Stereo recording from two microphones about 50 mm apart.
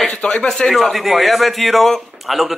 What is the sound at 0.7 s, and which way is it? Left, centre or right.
A man's voice, centre.